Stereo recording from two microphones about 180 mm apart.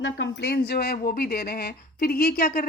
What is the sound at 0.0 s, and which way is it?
Speech, 85° left.